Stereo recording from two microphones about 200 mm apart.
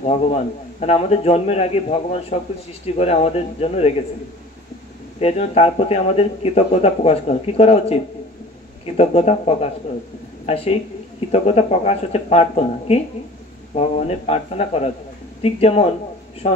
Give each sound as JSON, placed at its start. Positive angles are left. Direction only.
{"t": 0.0, "sound": "speech", "side_deg": 30}
{"t": 5.2, "sound": "speech", "side_deg": 30}
{"t": 15.4, "sound": "speech", "side_deg": 30}